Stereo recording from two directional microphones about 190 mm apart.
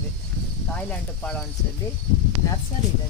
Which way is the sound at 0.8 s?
10° left (ahead or behind).